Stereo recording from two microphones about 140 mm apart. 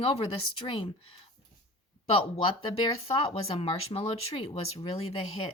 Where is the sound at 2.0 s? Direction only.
40° left (ahead or behind).